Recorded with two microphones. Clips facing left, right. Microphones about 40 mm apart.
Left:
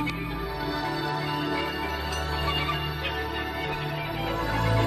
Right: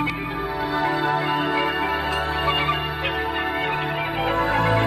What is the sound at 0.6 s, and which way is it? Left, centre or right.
Music, right.